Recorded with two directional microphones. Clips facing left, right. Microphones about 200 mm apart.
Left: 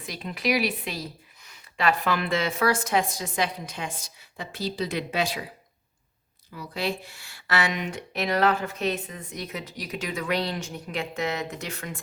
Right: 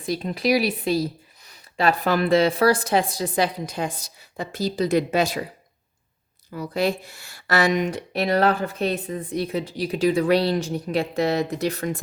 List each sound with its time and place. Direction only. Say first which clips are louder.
0.0 s speech: right 6 dB; 35° right (ahead or behind)
6.5 s speech: right 7 dB; 45° right (ahead or behind)